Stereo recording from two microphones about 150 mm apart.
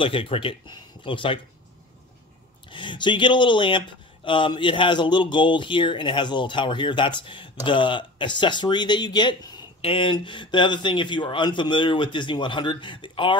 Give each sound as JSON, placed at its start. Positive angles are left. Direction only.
{"t": 0.0, "sound": "speech", "side_deg": 35}
{"t": 2.7, "sound": "speech", "side_deg": 30}